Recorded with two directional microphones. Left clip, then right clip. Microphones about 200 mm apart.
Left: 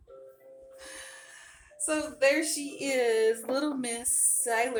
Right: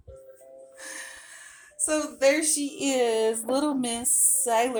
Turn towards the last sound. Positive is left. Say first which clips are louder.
# right 4 dB
turn(degrees=-30)  # may be behind; listen again after turning